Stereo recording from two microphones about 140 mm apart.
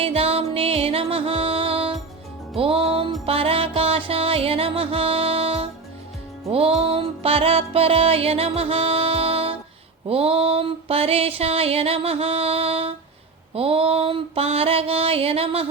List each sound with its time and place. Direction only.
0.0 s music: 45° right (ahead or behind)